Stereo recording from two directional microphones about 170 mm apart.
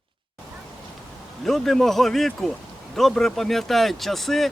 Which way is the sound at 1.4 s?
Centre (ahead or behind).